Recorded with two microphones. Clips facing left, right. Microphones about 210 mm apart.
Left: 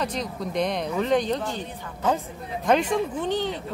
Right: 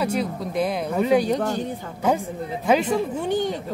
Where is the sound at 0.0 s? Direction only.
10° right (ahead or behind).